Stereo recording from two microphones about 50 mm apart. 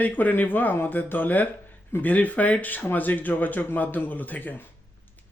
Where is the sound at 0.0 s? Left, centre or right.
Left.